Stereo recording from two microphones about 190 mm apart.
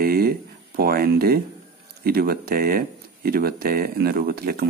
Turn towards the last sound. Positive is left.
turn(degrees=-55)  # may be behind; listen again after turning